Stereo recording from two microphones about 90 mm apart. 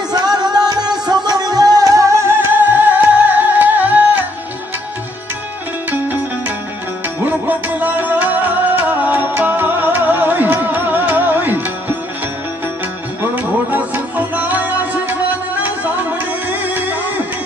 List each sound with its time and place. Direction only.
0.1 s music: 50° right (ahead or behind); by 4.2 s 20° right (ahead or behind)
7.2 s music: 20° right (ahead or behind)
13.2 s music: 20° right (ahead or behind)